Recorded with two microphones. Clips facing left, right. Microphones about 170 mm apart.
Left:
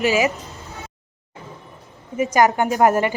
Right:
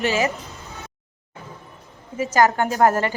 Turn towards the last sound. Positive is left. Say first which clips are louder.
# left 2 dB
turn(degrees=15)  # may be behind; listen again after turning